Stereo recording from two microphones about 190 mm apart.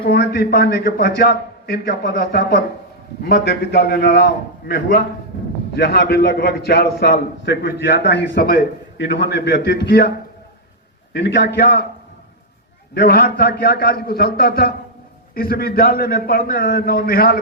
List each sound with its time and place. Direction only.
0.0 s a man's voice: 55° left (ahead or behind)
5.7 s a man's voice: 55° left (ahead or behind)
11.1 s a man's voice: 65° left (ahead or behind)
12.9 s a man's voice: 55° left (ahead or behind)